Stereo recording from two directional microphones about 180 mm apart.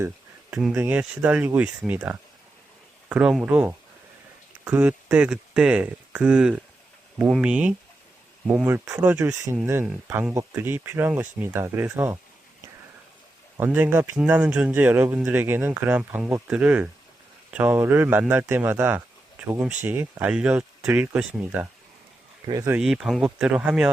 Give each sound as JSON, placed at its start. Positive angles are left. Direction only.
{"t": 0.5, "sound": "speech", "side_deg": -5}
{"t": 13.6, "sound": "speech", "side_deg": -10}
{"t": 22.8, "sound": "speech", "side_deg": -5}